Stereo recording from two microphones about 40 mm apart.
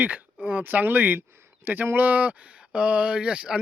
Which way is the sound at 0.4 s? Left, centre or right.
Right.